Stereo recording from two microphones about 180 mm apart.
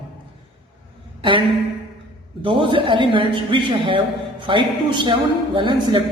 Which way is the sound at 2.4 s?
25° right (ahead or behind).